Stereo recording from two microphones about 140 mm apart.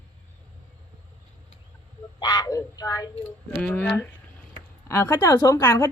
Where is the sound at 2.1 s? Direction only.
30° left (ahead or behind).